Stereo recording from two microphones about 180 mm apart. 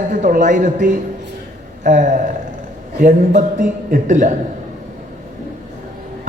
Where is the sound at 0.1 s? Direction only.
45° right (ahead or behind).